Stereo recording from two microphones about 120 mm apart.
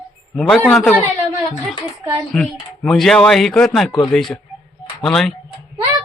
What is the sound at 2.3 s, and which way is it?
Speech, 5° left (ahead or behind).